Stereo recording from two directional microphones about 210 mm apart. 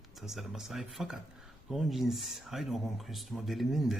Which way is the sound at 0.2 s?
Centre (ahead or behind).